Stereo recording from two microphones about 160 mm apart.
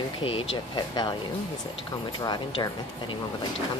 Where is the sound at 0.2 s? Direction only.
35° left (ahead or behind).